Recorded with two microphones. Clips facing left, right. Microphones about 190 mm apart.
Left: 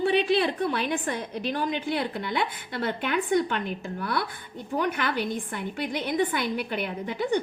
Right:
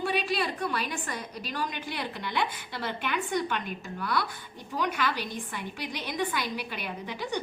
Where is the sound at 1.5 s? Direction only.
55° left (ahead or behind).